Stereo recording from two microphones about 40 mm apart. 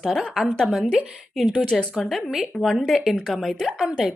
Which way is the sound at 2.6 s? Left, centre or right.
Centre.